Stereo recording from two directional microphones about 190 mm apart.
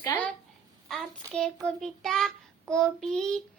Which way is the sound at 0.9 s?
Centre (ahead or behind).